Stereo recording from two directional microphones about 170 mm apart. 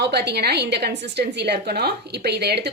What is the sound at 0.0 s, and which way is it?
A woman's voice, 80° right.